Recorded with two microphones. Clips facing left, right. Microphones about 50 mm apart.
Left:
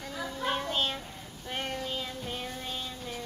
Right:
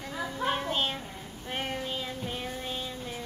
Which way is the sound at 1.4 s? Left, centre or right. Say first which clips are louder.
Right 1 dB; centre.